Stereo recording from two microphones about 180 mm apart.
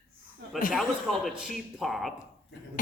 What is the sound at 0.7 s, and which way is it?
Speech, centre (ahead or behind).